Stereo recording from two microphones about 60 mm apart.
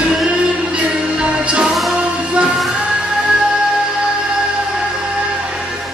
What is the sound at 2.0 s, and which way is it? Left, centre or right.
Music, centre.